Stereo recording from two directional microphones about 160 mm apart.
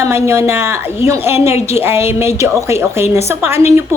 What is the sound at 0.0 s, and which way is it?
A woman's voice, 15° right (ahead or behind).